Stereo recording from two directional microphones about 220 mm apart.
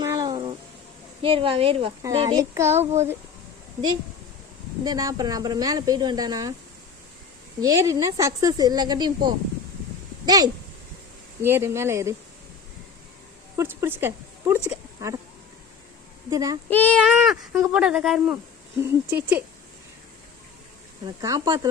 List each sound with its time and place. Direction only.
0.0 s a sound: 15° right (ahead or behind)
1.2 s a woman's voice: 25° right (ahead or behind)
4.8 s a woman's voice: 15° right (ahead or behind)
7.6 s a woman's voice: 15° right (ahead or behind)
13.6 s speech: 10° right (ahead or behind)
16.3 s a woman's voice: 15° right (ahead or behind)
16.6 s a woman's voice: 5° left (ahead or behind); by 19.4 s 10° right (ahead or behind)
21.2 s a woman's voice: 15° right (ahead or behind)